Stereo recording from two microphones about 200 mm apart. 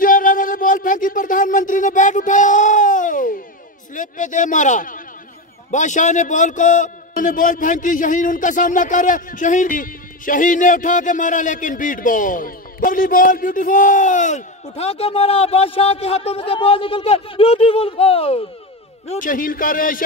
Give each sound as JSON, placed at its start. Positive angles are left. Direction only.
{"t": 0.0, "sound": "music", "side_deg": 45}
{"t": 3.9, "sound": "a sound", "side_deg": 40}
{"t": 5.7, "sound": "a man's voice", "side_deg": 40}
{"t": 19.0, "sound": "a man's voice", "side_deg": 40}